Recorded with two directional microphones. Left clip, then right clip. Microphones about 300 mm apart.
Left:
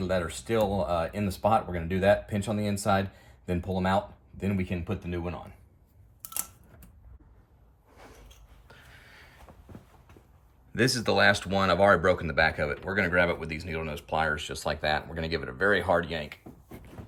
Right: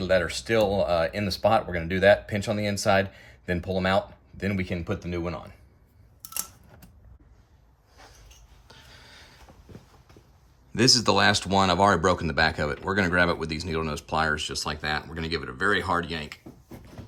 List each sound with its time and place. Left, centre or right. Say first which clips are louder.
0.0 s speech: right 6 dB; centre
8.6 s a sound: right 3 dB; centre
10.7 s speech: right 5 dB; centre